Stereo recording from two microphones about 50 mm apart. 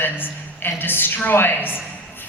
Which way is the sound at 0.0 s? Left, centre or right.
Left.